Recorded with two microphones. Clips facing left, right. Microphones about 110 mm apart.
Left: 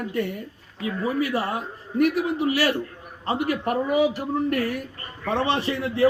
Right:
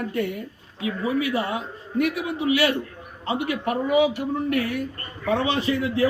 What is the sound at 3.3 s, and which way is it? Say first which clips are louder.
A man's voice: left 1 dB; 40° left (ahead or behind).